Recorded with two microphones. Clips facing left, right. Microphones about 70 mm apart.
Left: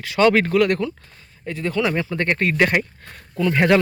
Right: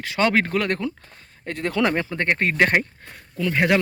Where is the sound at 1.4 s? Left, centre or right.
Right.